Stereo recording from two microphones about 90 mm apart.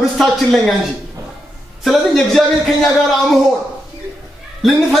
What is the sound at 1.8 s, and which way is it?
A man's voice, centre (ahead or behind).